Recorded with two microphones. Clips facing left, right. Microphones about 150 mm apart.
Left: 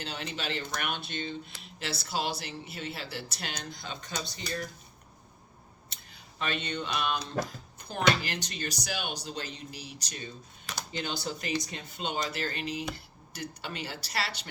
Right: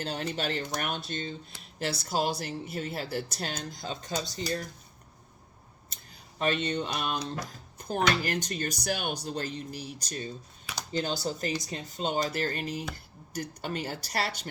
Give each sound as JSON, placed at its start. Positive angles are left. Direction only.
{"t": 0.0, "sound": "speech", "side_deg": -45}
{"t": 5.9, "sound": "speech", "side_deg": -40}